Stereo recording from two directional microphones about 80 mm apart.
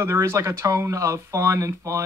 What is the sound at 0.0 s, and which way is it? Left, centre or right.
Speech, right.